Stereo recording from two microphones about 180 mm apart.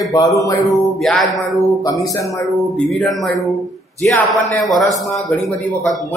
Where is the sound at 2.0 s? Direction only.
20° left (ahead or behind).